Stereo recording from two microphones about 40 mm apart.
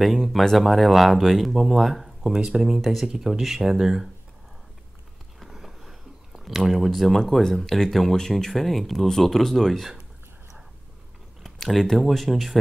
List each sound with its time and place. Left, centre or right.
0.2 s speech: centre
2.3 s speech: centre
2.8 s speech: centre
5.4 s a sound: centre
6.5 s speech: centre
11.6 s speech: centre